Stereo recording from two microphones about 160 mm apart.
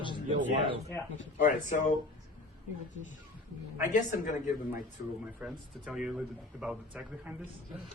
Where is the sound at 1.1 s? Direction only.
55° left (ahead or behind).